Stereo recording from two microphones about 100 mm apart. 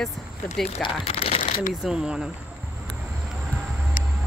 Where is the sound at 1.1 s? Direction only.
85° left.